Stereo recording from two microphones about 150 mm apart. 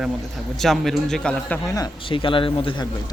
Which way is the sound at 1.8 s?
35° left (ahead or behind).